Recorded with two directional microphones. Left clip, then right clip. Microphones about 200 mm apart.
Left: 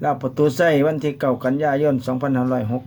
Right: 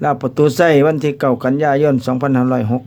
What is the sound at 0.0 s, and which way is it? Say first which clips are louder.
Speech: right 5 dB; 50° right (ahead or behind).